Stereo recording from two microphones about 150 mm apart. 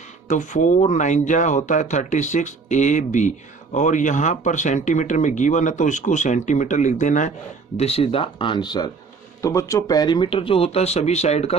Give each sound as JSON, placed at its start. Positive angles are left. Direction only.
{"t": 0.3, "sound": "speech", "side_deg": 55}
{"t": 7.8, "sound": "speech", "side_deg": 40}